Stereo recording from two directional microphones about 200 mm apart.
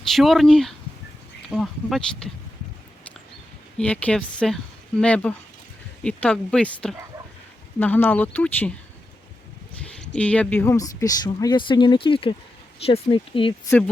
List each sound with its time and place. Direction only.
0.1 s a woman's voice: centre (ahead or behind)
3.8 s a woman's voice: 5° left (ahead or behind)
10.2 s speech: 5° left (ahead or behind); by 13.5 s 25° left (ahead or behind)
13.7 s speech: 10° left (ahead or behind)